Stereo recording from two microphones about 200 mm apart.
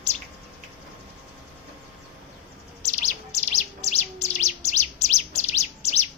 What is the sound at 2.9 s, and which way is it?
Chirp, 35° left (ahead or behind).